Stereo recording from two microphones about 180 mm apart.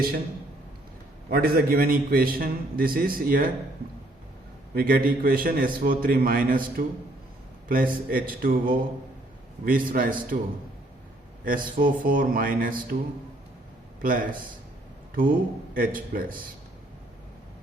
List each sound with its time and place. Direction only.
1.3 s a man's voice: 55° right (ahead or behind)
4.7 s a man's voice: 55° right (ahead or behind)
11.4 s a man's voice: 50° right (ahead or behind)
14.0 s a man's voice: 50° right (ahead or behind)